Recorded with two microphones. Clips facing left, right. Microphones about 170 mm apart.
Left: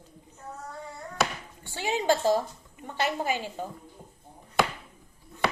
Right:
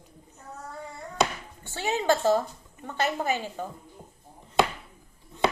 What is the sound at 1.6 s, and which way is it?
Speech, 15° left (ahead or behind).